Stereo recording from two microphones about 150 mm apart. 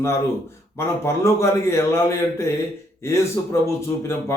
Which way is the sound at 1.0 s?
20° left (ahead or behind).